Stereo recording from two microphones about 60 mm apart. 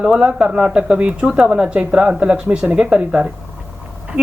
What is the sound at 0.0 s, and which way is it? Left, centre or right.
Speech, centre.